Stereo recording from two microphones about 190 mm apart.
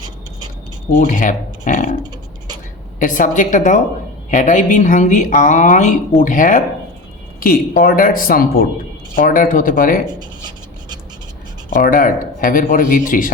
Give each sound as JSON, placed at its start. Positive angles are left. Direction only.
{"t": 0.9, "sound": "speech", "side_deg": 45}
{"t": 3.0, "sound": "speech", "side_deg": 45}
{"t": 10.1, "sound": "rub", "side_deg": -20}
{"t": 11.8, "sound": "speech", "side_deg": 45}